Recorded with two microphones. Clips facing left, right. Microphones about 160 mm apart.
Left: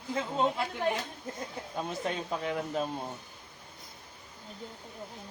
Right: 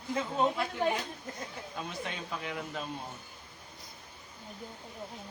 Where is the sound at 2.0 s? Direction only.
40° left (ahead or behind).